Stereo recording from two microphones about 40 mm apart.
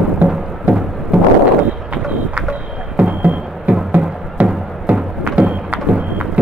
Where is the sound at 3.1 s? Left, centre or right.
Right.